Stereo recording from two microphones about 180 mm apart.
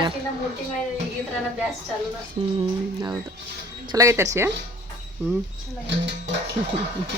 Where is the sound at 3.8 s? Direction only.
20° right (ahead or behind).